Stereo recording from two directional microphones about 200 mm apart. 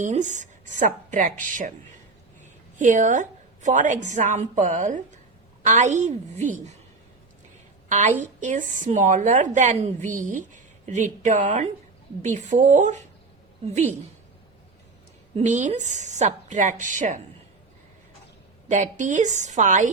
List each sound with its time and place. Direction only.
0.0 s a woman's voice: 35° right (ahead or behind)
7.9 s a woman's voice: 35° right (ahead or behind)
15.4 s a woman's voice: 35° right (ahead or behind)
18.7 s a woman's voice: 40° right (ahead or behind)